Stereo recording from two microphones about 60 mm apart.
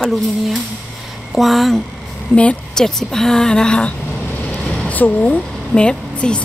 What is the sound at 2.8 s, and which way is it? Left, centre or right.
A woman's voice, centre.